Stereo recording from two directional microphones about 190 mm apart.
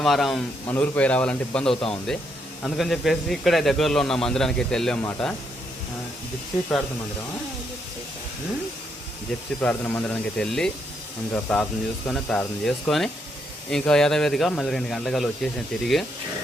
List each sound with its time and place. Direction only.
0.0 s a man's voice: centre (ahead or behind)
1.7 s speech: 30° left (ahead or behind)
2.6 s a man's voice: centre (ahead or behind)
9.6 s a man's voice: 10° left (ahead or behind)